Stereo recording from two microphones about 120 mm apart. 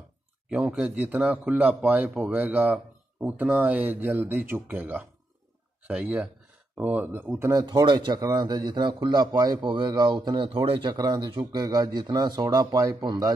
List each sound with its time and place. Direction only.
0.5 s speech: 10° right (ahead or behind)
7.6 s a man's voice: 40° right (ahead or behind)
10.9 s a man's voice: 35° right (ahead or behind)